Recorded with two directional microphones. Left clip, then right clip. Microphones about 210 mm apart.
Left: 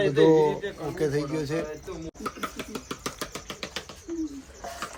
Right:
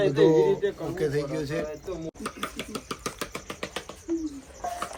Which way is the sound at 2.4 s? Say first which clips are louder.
Even; centre (ahead or behind).